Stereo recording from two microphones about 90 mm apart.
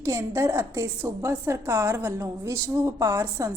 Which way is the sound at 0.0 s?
35° right (ahead or behind).